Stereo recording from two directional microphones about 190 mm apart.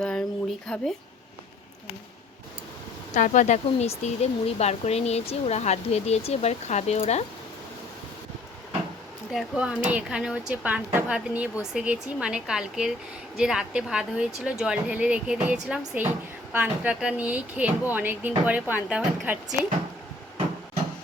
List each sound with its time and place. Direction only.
0.0 s a sound: 5° left (ahead or behind)
0.7 s speech: 5° left (ahead or behind)
3.2 s speech: 40° left (ahead or behind)
9.3 s a woman's voice: 5° right (ahead or behind)